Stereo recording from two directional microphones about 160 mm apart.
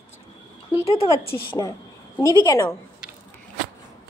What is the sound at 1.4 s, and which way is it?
A woman's voice, 20° left (ahead or behind).